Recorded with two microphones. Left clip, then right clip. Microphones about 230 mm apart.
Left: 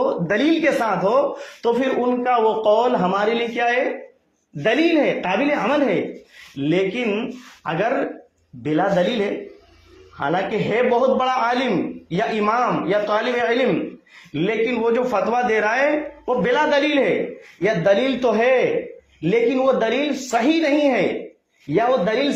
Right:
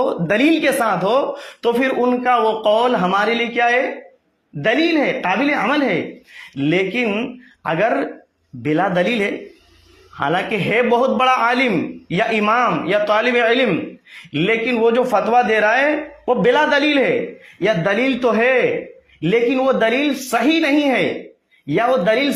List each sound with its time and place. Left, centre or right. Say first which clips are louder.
0.0 s a man's voice: right 3 dB; right